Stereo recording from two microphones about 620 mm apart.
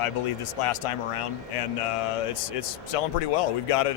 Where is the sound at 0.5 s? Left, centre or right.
Left.